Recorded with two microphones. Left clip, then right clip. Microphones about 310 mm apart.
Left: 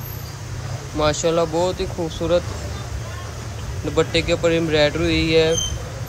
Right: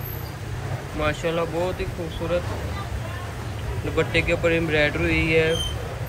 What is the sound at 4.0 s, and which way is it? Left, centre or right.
Speech, centre.